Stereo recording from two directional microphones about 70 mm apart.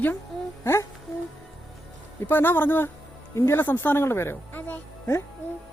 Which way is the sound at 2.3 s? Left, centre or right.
Left.